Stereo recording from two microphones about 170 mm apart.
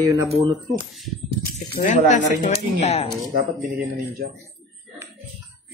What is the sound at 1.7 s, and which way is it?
Speech, 45° left (ahead or behind).